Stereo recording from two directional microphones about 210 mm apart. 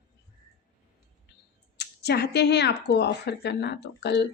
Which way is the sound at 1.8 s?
50° left (ahead or behind).